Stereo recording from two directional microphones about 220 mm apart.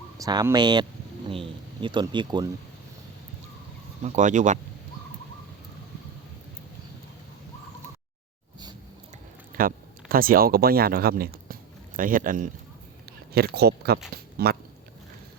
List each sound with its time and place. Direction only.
0.2 s speech: 15° right (ahead or behind)
4.0 s speech: 35° right (ahead or behind)
9.6 s speech: 40° right (ahead or behind)